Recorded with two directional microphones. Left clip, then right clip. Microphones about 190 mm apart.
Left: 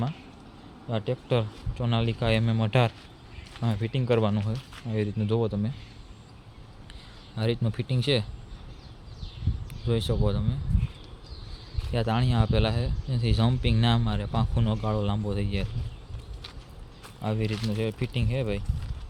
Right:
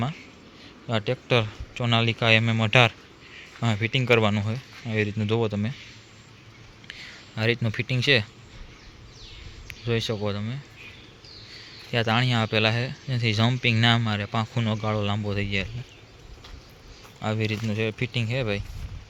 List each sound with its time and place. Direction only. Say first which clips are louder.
0.9 s a man's voice: right 4 dB; 10° right (ahead or behind)
6.8 s speech: right 10 dB; centre (ahead or behind)
9.6 s speech: right 2 dB; 5° left (ahead or behind)
11.9 s a man's voice: right 5 dB; centre (ahead or behind)
17.2 s a man's voice: right 3 dB; centre (ahead or behind)